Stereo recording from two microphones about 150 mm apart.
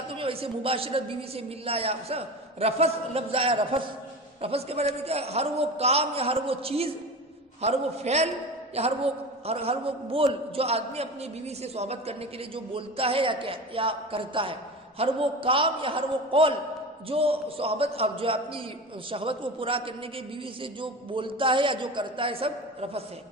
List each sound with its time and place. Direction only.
0.1 s a man's voice: 40° right (ahead or behind)